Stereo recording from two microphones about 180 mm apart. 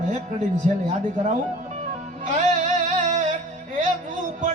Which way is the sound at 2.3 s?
40° right (ahead or behind).